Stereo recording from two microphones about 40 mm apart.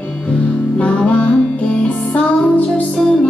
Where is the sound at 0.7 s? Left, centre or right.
Left.